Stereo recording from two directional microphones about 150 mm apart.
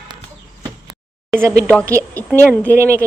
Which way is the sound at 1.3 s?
20° right (ahead or behind).